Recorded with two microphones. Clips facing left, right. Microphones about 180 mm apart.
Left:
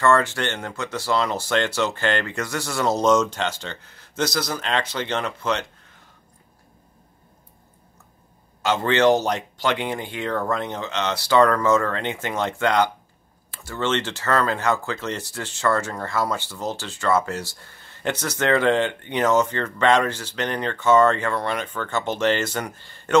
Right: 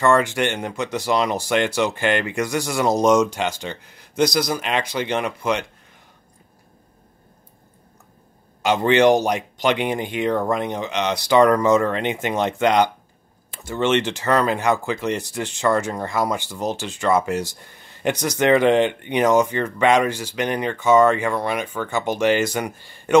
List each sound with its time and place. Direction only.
0.0 s speech: 15° right (ahead or behind)
8.6 s speech: 15° right (ahead or behind)